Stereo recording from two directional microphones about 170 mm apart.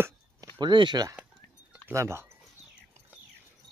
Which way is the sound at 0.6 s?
25° right (ahead or behind).